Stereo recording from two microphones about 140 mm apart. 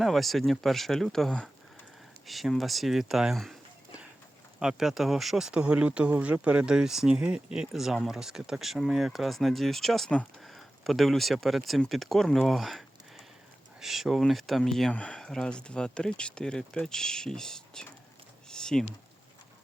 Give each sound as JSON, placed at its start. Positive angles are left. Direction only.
{"t": 0.0, "sound": "speech", "side_deg": 0}
{"t": 4.6, "sound": "speech", "side_deg": -5}
{"t": 13.8, "sound": "speech", "side_deg": 0}
{"t": 18.4, "sound": "a sound", "side_deg": 5}